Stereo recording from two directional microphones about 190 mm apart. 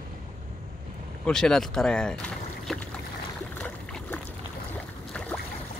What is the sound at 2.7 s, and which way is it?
Boat, centre (ahead or behind).